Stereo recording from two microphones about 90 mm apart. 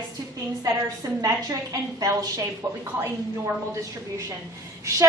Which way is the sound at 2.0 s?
40° right (ahead or behind).